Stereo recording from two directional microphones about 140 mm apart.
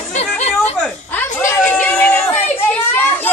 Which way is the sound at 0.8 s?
10° left (ahead or behind).